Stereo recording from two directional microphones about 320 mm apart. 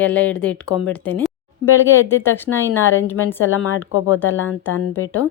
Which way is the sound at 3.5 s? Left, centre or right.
Left.